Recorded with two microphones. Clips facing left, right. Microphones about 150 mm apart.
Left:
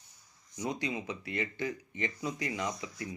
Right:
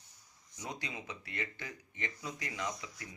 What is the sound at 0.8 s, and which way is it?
Speech, 20° left (ahead or behind).